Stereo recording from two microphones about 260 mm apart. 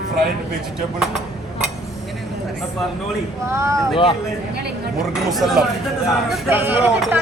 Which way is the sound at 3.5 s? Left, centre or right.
Centre.